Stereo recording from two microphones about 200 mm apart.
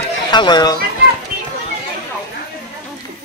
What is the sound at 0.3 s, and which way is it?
Speech, 20° left (ahead or behind).